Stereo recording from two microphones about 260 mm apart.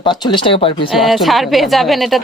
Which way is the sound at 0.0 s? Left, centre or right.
Centre.